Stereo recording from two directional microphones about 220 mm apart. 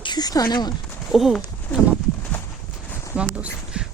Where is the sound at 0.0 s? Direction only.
20° left (ahead or behind).